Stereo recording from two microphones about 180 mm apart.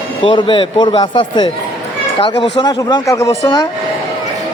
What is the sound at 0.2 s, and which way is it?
Speech, 30° left (ahead or behind).